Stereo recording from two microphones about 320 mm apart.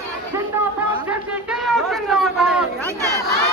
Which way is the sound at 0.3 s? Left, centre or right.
Centre.